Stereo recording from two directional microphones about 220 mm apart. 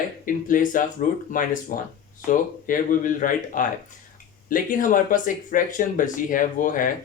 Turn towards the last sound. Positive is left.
turn(degrees=40)  # may be behind; listen again after turning